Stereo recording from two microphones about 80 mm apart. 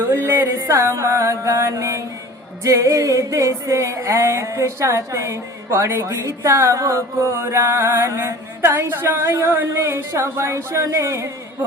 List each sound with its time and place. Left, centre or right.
0.2 s mantra: right
2.6 s music: right